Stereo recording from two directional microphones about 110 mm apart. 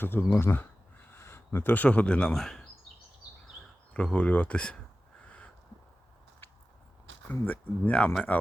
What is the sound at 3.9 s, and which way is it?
Speech, 10° left (ahead or behind).